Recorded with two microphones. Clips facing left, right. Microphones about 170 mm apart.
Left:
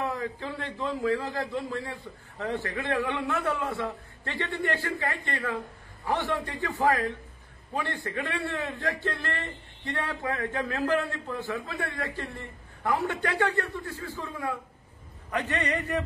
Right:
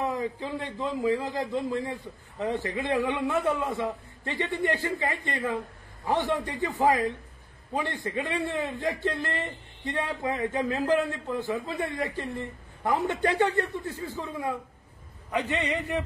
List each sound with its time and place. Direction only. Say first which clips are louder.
0.0 s a man's voice: right 2 dB; 15° right (ahead or behind)